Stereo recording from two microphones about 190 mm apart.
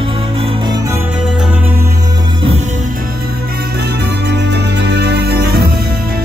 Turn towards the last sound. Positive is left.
turn(degrees=-55)  # may be behind; listen again after turning